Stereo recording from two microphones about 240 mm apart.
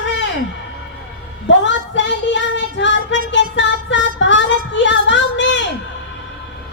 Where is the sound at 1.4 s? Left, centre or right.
Left.